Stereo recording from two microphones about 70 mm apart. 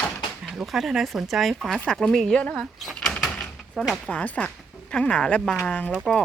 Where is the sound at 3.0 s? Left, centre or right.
Centre.